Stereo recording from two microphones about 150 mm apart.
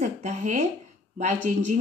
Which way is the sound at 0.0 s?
50° right (ahead or behind).